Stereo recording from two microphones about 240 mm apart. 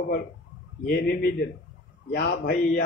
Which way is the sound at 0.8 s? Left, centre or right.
Left.